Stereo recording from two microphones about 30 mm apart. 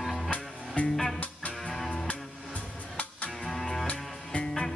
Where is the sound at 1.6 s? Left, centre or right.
Centre.